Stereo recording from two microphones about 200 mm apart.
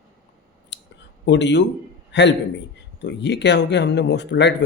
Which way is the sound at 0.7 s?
65° left (ahead or behind).